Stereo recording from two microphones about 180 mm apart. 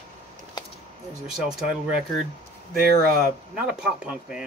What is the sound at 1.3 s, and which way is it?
Speech, 5° right (ahead or behind).